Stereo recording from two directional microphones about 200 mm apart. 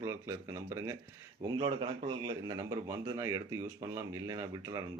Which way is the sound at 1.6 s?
25° right (ahead or behind).